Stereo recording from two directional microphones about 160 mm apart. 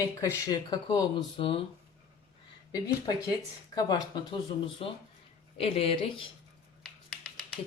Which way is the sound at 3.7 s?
25° left (ahead or behind).